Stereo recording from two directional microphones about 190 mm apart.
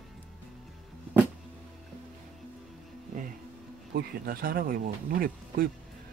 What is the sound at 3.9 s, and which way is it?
Speech, 50° right (ahead or behind).